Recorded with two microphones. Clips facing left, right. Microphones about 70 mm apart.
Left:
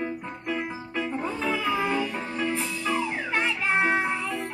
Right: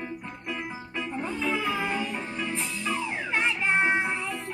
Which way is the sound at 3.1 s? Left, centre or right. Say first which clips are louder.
Left 1 dB; centre.